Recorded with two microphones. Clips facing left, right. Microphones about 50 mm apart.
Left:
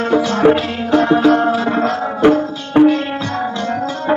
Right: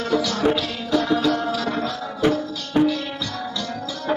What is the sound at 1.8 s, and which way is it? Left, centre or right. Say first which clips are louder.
Music: left 11 dB; left.